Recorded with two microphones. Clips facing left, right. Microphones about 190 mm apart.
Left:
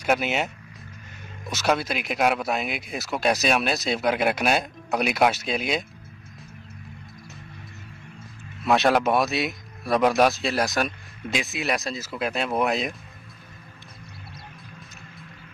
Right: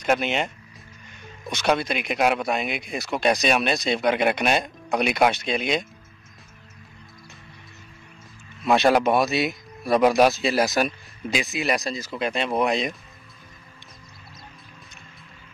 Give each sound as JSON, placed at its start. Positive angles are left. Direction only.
{"t": 0.0, "sound": "speech", "side_deg": 5}
{"t": 1.5, "sound": "speech", "side_deg": 5}
{"t": 8.6, "sound": "speech", "side_deg": 0}